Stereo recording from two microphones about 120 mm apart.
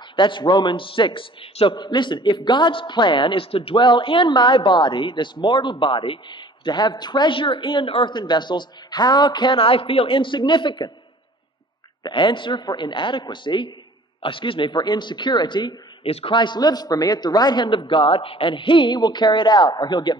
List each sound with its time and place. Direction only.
0.1 s a man's voice: 40° left (ahead or behind)
12.0 s a man's voice: 40° left (ahead or behind)
16.1 s a man's voice: 55° left (ahead or behind)
16.3 s a man's voice: 35° left (ahead or behind)